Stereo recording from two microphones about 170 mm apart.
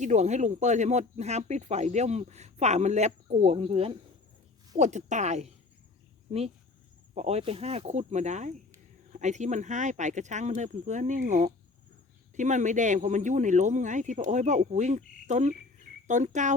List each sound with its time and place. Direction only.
0.0 s speech: 45° right (ahead or behind)
7.1 s speech: 40° right (ahead or behind)